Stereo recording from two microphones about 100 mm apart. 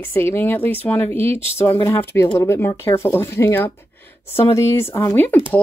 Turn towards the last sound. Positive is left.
turn(degrees=20)  # may be behind; listen again after turning